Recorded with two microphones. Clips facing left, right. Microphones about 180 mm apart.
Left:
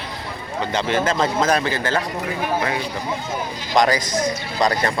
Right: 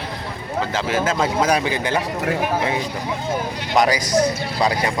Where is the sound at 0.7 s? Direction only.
5° right (ahead or behind).